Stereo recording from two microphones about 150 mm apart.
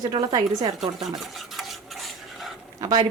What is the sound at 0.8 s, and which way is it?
Stir, centre (ahead or behind).